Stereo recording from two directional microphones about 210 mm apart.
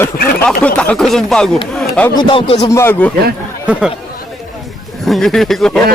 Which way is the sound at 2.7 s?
10° left (ahead or behind).